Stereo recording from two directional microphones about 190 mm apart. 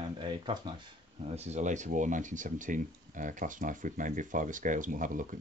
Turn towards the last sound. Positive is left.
turn(degrees=-45)  # may be behind; listen again after turning